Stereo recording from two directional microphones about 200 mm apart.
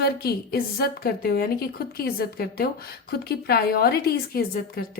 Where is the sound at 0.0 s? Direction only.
50° left (ahead or behind).